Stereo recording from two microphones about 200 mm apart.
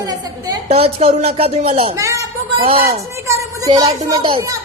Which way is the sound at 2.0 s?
15° right (ahead or behind).